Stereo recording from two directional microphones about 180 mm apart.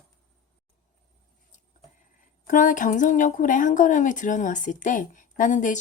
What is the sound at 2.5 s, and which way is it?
A woman's voice, 45° left (ahead or behind).